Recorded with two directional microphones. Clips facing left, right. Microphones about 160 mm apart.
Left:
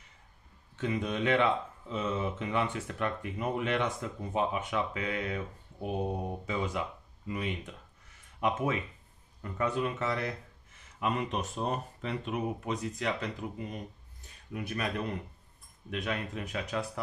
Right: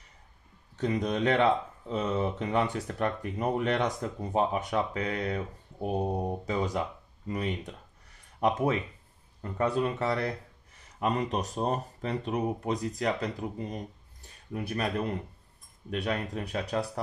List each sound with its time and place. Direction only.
0.7 s speech: 40° right (ahead or behind)